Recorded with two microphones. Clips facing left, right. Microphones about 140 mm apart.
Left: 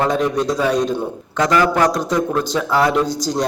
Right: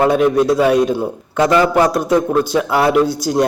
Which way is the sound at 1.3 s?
25° right (ahead or behind).